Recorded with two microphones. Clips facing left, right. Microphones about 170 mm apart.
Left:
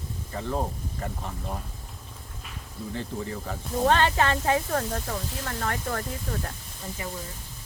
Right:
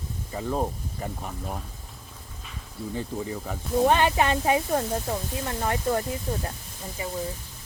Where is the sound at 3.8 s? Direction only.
15° right (ahead or behind).